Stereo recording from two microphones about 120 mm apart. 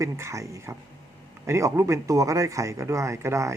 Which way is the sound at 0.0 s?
25° right (ahead or behind).